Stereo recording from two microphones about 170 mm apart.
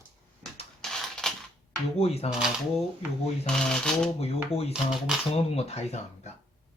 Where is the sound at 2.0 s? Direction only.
35° left (ahead or behind).